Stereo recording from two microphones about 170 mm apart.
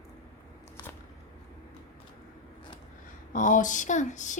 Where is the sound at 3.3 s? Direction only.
50° left (ahead or behind).